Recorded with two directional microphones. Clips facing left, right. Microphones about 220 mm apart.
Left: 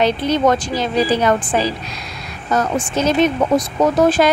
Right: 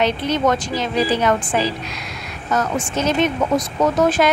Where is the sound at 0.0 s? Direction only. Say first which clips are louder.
Left 3 dB; 35° left (ahead or behind).